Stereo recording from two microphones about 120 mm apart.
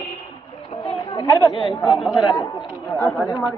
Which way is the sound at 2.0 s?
Centre (ahead or behind).